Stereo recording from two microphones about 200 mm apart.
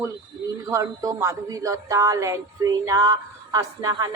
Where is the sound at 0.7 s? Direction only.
15° right (ahead or behind).